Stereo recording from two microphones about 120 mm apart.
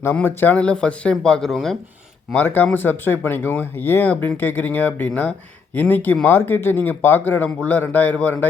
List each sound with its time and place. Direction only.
0.0 s speech: 20° left (ahead or behind); by 1.7 s centre (ahead or behind)
2.3 s speech: 15° left (ahead or behind)